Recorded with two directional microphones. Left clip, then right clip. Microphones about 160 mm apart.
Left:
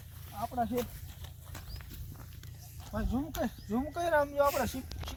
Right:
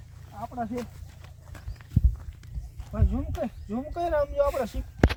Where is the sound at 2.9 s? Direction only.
40° right (ahead or behind).